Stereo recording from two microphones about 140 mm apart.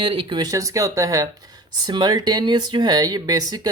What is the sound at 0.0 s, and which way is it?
Speech, 40° right (ahead or behind).